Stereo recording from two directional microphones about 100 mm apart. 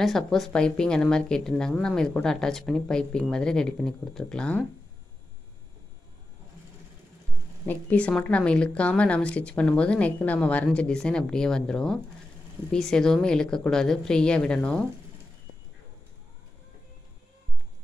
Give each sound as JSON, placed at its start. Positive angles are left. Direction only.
{"t": 0.0, "sound": "a woman's voice", "side_deg": 0}
{"t": 7.6, "sound": "a woman's voice", "side_deg": 15}